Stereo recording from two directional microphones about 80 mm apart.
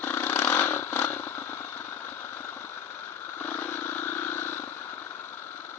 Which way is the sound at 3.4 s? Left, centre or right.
Left.